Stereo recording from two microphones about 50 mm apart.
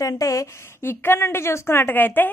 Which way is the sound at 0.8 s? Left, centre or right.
Left.